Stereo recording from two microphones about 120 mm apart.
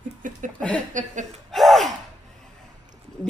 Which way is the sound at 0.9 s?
90° right.